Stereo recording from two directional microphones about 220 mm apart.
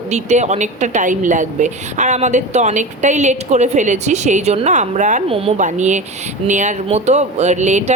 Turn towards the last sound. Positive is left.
turn(degrees=-35)  # may be behind; listen again after turning